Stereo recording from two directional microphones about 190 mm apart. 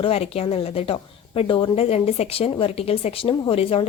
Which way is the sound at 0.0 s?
30° left (ahead or behind).